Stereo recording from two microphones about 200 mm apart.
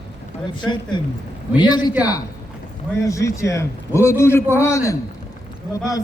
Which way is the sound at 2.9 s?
15° left (ahead or behind).